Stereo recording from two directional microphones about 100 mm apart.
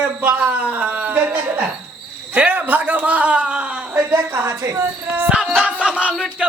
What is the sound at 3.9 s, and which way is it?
Speech, 25° right (ahead or behind).